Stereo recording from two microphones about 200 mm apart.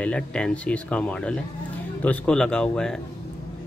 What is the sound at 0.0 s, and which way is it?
Speech, 5° left (ahead or behind).